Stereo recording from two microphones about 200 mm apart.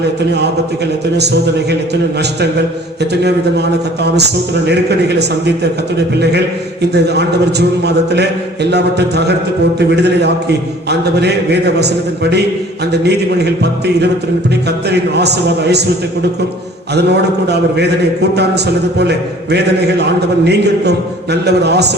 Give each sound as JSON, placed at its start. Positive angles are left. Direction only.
{"t": 3.0, "sound": "a man's voice", "side_deg": -55}
{"t": 6.9, "sound": "a man's voice", "side_deg": -55}
{"t": 16.9, "sound": "a man's voice", "side_deg": -55}